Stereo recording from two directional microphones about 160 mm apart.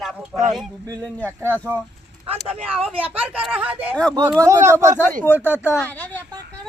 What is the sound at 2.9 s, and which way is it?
Speech, 10° right (ahead or behind).